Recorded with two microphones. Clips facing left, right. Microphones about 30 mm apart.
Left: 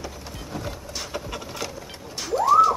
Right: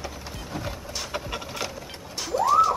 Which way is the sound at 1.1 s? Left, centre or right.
Centre.